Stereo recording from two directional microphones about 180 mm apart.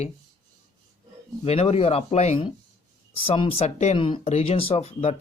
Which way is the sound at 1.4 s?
35° left (ahead or behind).